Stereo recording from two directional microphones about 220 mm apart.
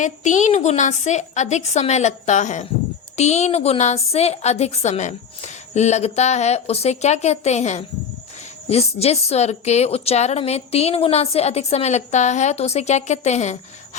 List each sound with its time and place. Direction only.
0.0 s a woman's voice: 35° left (ahead or behind)